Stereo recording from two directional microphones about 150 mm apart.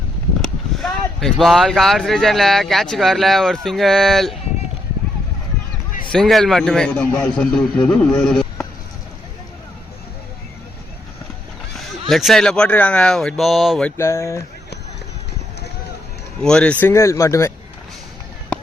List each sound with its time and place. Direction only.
0.4 s speech: centre (ahead or behind)
6.1 s speech: centre (ahead or behind)
11.8 s speech: centre (ahead or behind)
13.9 s speech: 20° left (ahead or behind)
16.4 s speech: 5° left (ahead or behind)
16.9 s speech: 20° left (ahead or behind)